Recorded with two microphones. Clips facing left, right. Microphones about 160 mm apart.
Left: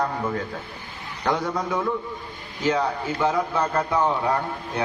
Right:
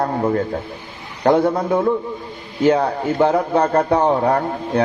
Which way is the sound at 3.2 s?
60° right (ahead or behind).